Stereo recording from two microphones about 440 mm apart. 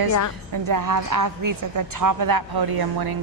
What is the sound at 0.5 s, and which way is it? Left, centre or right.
A woman's voice, right.